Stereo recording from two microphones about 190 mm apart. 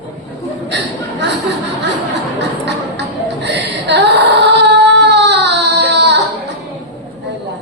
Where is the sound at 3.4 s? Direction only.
65° right (ahead or behind).